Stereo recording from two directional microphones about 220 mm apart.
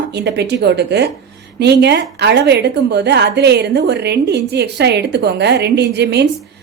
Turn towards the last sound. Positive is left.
turn(degrees=-50)  # may be behind; listen again after turning